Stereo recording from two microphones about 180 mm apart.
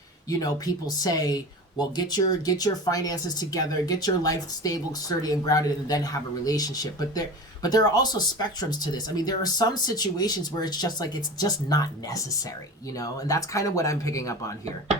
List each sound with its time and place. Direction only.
0.3 s speech: 20° left (ahead or behind)